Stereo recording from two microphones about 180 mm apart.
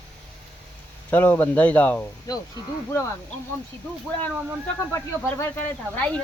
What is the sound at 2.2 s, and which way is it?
Speech, 20° left (ahead or behind).